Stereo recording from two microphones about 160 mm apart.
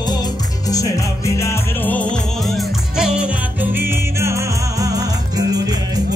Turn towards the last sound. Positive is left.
turn(degrees=-25)  # may be behind; listen again after turning